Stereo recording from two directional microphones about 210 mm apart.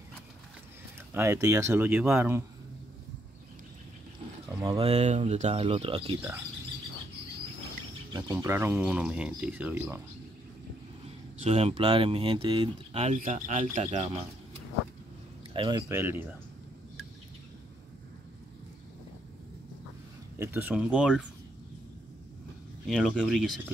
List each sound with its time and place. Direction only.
1.1 s speech: 15° right (ahead or behind)
4.5 s a sound: 15° right (ahead or behind)
4.7 s speech: 30° right (ahead or behind)
8.1 s speech: 10° right (ahead or behind)
11.4 s speech: 30° right (ahead or behind)
15.5 s a man's voice: 25° right (ahead or behind)
15.9 s speech: 10° right (ahead or behind)
20.3 s speech: 10° right (ahead or behind)
22.8 s speech: centre (ahead or behind)